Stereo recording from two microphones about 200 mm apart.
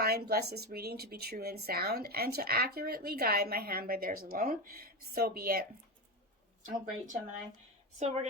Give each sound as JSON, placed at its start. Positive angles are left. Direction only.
{"t": 0.0, "sound": "speech", "side_deg": -50}